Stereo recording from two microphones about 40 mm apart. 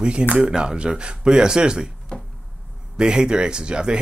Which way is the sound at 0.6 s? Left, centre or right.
Right.